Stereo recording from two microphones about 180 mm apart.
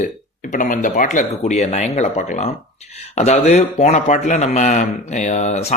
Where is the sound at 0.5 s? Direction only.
45° left (ahead or behind).